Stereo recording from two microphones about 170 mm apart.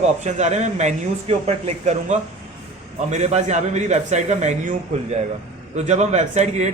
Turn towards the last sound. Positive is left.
turn(degrees=-40)  # may be behind; listen again after turning